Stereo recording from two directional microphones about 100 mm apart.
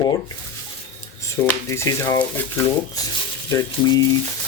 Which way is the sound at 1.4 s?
25° left (ahead or behind).